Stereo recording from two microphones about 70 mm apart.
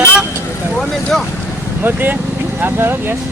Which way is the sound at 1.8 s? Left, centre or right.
Right.